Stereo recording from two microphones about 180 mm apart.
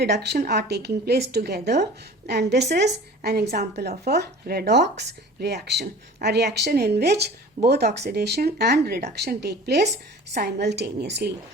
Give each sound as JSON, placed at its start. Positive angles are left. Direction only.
{"t": 0.0, "sound": "speech", "side_deg": -65}
{"t": 5.8, "sound": "a woman's voice", "side_deg": -60}